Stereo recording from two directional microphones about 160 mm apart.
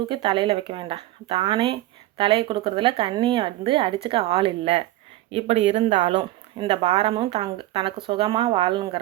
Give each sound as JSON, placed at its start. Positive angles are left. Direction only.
{"t": 0.1, "sound": "speech", "side_deg": -35}